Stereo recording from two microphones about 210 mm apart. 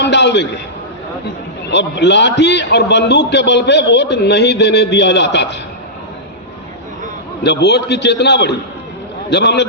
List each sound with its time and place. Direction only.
0.0 s a man's voice: 55° left (ahead or behind)
1.6 s a man's voice: 55° left (ahead or behind)
7.4 s a man's voice: 55° left (ahead or behind)